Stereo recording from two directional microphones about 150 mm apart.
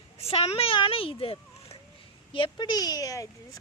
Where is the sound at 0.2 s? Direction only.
40° left (ahead or behind).